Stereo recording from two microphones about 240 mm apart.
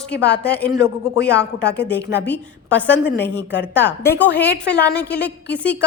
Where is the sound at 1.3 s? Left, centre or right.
Left.